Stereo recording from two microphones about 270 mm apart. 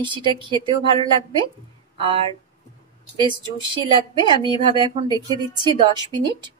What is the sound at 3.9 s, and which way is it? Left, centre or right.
A woman's voice, centre.